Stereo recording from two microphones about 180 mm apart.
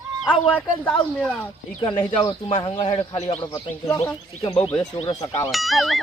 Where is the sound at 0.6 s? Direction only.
10° left (ahead or behind).